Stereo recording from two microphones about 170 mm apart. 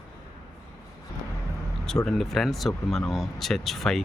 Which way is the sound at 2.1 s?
Centre (ahead or behind).